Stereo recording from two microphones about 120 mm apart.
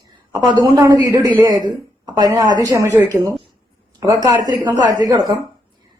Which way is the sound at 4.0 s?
35° right (ahead or behind).